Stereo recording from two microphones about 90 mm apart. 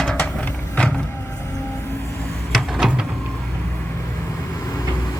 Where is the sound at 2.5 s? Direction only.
Centre (ahead or behind).